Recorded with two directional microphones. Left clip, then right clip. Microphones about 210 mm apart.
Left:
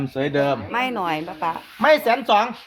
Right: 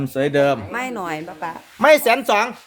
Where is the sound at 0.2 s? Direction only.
40° right (ahead or behind).